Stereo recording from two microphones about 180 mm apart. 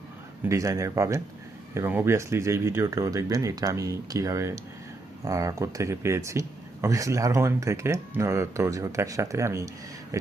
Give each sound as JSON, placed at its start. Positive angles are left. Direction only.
{"t": 0.4, "sound": "speech", "side_deg": -15}